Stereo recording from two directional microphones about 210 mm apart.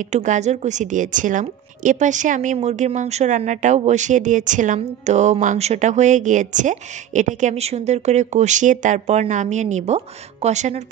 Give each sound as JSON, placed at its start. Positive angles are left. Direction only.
{"t": 0.1, "sound": "a woman's voice", "side_deg": -35}